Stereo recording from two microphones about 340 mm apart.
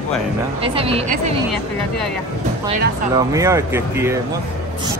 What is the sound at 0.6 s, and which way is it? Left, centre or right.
Speech, centre.